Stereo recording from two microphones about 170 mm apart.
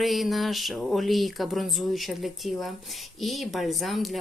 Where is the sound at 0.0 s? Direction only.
Centre (ahead or behind).